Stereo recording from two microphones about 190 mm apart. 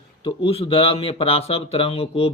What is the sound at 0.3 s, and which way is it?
Speech, 30° left (ahead or behind).